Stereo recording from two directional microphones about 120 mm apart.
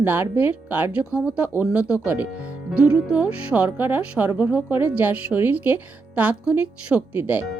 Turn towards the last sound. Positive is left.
turn(degrees=-10)  # may be behind; listen again after turning